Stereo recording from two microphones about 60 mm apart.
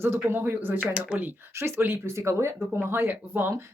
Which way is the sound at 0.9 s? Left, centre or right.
Centre.